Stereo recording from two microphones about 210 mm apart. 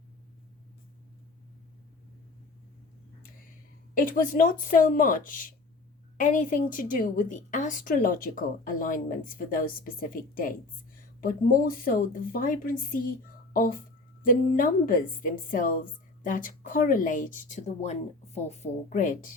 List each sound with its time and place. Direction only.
3.9 s a woman's voice: 40° left (ahead or behind)